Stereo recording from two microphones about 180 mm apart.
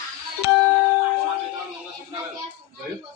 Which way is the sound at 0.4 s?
55° left (ahead or behind).